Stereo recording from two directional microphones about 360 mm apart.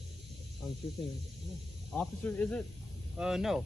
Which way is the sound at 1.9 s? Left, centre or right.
Centre.